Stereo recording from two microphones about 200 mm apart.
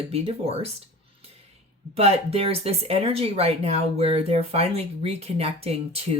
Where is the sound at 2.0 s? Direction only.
30° right (ahead or behind).